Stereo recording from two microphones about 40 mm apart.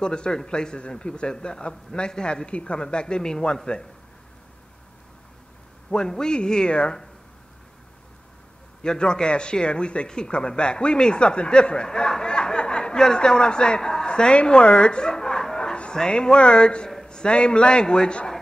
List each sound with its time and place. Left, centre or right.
0.0 s a man's voice: left
5.9 s a man's voice: centre
8.8 s a man's voice: left